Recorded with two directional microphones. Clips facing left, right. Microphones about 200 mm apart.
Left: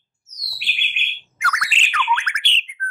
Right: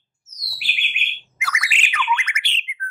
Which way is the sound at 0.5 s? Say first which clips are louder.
Right 1 dB; centre (ahead or behind).